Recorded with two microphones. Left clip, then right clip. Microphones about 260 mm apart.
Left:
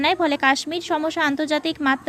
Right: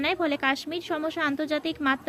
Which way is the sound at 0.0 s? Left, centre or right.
Centre.